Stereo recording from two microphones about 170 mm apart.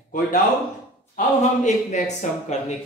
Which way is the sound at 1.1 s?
45° left (ahead or behind).